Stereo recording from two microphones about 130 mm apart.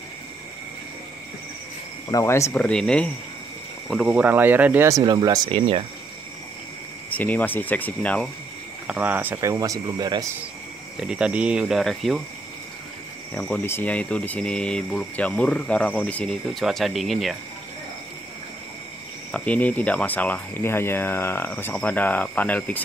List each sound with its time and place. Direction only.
2.0 s speech: 25° left (ahead or behind)
2.5 s speech: 5° left (ahead or behind)
4.1 s speech: 15° right (ahead or behind)
4.8 s speech: 30° right (ahead or behind)
5.5 s speech: 50° right (ahead or behind)
7.1 s speech: 10° left (ahead or behind)
8.8 s speech: 10° right (ahead or behind); by 10.2 s 30° right (ahead or behind)
11.0 s speech: 5° right (ahead or behind)
13.3 s speech: 5° left (ahead or behind)
19.3 s speech: 10° left (ahead or behind)